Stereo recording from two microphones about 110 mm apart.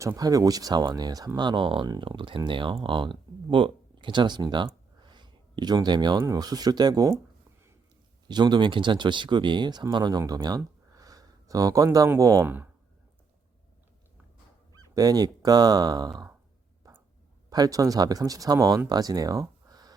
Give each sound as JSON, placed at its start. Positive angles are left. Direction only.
{"t": 0.0, "sound": "speech", "side_deg": -30}
{"t": 8.3, "sound": "speech", "side_deg": -40}
{"t": 10.6, "sound": "a sound", "side_deg": -35}
{"t": 14.8, "sound": "speech", "side_deg": -35}
{"t": 16.8, "sound": "a sound", "side_deg": -35}
{"t": 17.5, "sound": "speech", "side_deg": -35}